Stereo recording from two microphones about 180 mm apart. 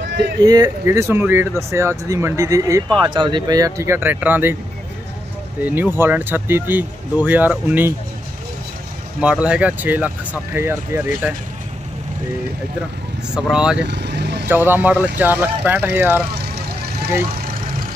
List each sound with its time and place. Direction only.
0.1 s a sound: 70° right (ahead or behind)
0.4 s speech: 20° right (ahead or behind)
5.7 s speech: 10° right (ahead or behind)
9.2 s speech: 5° right (ahead or behind)
13.3 s speech: 5° right (ahead or behind)
13.8 s vehicle: 70° right (ahead or behind)
14.5 s speech: 10° right (ahead or behind)